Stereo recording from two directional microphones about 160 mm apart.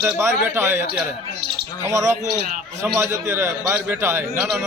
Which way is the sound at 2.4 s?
55° right (ahead or behind).